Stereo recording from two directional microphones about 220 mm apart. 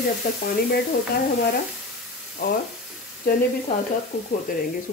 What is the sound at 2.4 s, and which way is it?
Speech, 45° left (ahead or behind).